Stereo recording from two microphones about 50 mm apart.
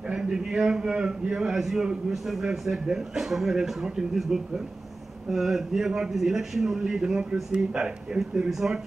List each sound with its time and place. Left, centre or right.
0.1 s a man's voice: centre